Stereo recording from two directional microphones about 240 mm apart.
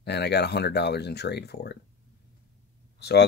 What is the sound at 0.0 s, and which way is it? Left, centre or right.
Speech, left.